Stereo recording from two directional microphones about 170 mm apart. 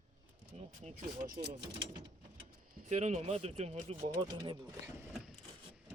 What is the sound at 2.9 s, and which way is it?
Speech, 40° right (ahead or behind).